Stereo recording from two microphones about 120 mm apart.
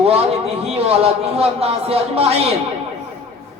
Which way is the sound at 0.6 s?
55° right (ahead or behind).